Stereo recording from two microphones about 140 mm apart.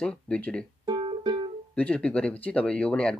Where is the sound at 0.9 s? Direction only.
35° right (ahead or behind).